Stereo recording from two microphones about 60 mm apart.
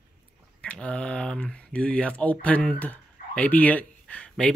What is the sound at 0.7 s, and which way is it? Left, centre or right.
Speech, centre.